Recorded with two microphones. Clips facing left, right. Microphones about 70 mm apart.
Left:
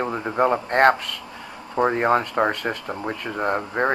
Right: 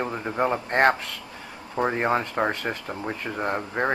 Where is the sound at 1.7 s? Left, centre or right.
Centre.